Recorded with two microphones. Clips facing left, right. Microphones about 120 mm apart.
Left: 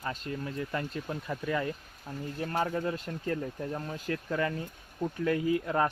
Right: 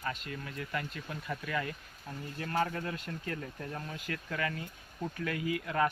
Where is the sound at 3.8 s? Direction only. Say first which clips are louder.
Left 6 dB; 35° left (ahead or behind).